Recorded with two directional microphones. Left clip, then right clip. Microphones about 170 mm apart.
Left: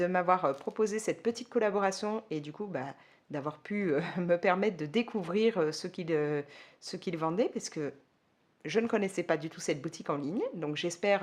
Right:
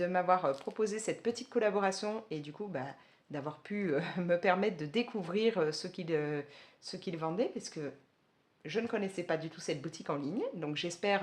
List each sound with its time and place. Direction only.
0.0 s speech: 40° left (ahead or behind)